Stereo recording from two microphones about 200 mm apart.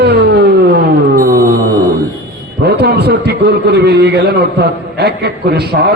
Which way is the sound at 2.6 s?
55° right (ahead or behind).